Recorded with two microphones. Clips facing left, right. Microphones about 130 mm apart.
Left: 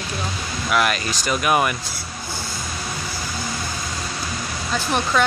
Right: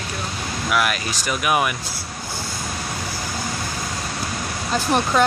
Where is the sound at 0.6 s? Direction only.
5° right (ahead or behind).